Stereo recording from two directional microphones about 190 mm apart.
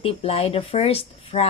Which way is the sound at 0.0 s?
30° left (ahead or behind).